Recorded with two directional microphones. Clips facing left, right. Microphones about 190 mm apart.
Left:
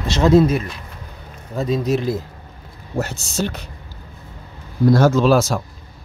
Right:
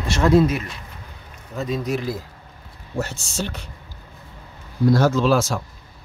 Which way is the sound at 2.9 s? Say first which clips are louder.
Left 3 dB; 40° left (ahead or behind).